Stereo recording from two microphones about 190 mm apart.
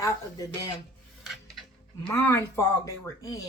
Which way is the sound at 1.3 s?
Centre (ahead or behind).